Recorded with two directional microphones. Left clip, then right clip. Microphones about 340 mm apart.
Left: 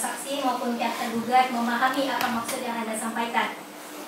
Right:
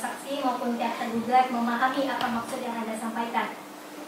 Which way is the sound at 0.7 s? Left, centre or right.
Centre.